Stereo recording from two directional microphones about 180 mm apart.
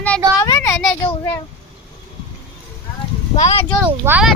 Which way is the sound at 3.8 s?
10° right (ahead or behind).